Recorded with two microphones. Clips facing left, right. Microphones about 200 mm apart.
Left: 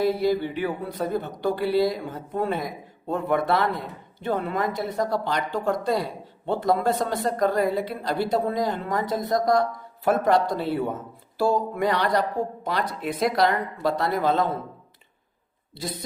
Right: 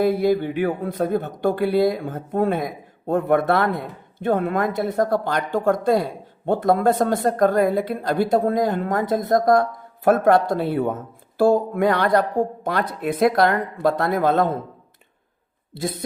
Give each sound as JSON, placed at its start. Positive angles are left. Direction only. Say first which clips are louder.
{"t": 0.0, "sound": "speech", "louder": "right 4 dB", "side_deg": -50}
{"t": 15.7, "sound": "speech", "louder": "right 6 dB", "side_deg": -50}